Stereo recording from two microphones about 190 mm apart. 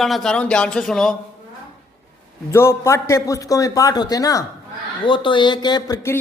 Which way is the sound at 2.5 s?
15° left (ahead or behind).